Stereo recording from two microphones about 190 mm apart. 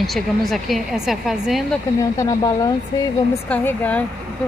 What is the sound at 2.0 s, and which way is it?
Speech, 20° left (ahead or behind).